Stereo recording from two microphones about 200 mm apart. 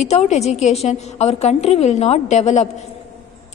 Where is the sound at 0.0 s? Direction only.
35° left (ahead or behind).